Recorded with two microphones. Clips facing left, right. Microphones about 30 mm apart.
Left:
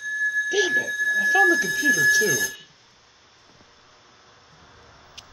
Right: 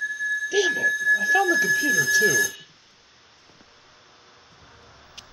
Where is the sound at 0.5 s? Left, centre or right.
Centre.